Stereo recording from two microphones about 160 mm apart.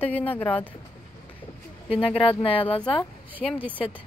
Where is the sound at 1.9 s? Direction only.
35° left (ahead or behind).